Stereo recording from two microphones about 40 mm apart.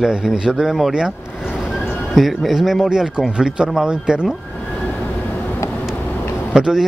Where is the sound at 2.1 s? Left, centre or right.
Centre; by 4.3 s right.